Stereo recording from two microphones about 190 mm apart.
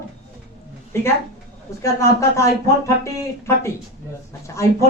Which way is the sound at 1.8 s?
15° left (ahead or behind).